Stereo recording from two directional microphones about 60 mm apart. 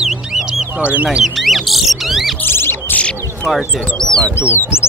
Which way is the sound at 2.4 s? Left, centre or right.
Left.